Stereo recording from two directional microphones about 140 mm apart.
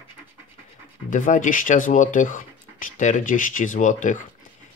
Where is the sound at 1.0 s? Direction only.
65° left (ahead or behind).